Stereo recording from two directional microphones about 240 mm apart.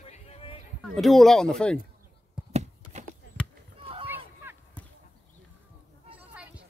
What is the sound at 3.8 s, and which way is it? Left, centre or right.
Run, right.